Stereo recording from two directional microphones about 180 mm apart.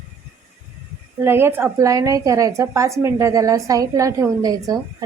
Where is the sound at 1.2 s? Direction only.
15° right (ahead or behind).